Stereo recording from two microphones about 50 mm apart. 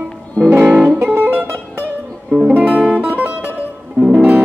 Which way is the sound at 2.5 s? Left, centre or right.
Right.